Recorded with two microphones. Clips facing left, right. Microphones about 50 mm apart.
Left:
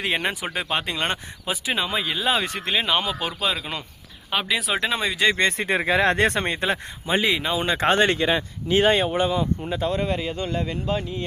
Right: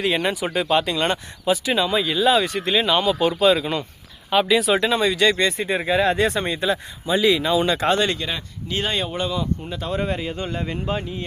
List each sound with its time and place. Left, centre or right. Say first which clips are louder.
0.0 s speech: right 3 dB; left
3.2 s speech: right 9 dB; centre
5.4 s speech: even; left
5.6 s speech: even; left
7.3 s speech: right 4 dB; left
9.8 s speech: even; centre